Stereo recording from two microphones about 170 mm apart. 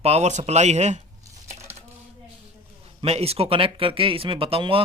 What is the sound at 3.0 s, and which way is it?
Speech, 35° right (ahead or behind).